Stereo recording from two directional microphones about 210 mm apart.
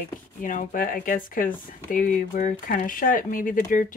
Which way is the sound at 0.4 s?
40° left (ahead or behind).